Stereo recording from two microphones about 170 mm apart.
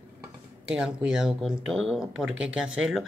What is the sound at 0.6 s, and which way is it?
Speech, 5° right (ahead or behind).